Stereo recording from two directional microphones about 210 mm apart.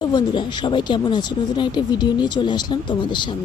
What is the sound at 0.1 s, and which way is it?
Speech, 20° left (ahead or behind).